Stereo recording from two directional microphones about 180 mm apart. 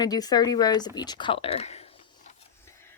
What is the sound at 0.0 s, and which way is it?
A woman's voice, 20° left (ahead or behind).